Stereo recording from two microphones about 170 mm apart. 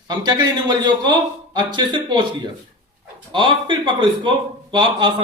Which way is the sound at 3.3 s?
30° right (ahead or behind).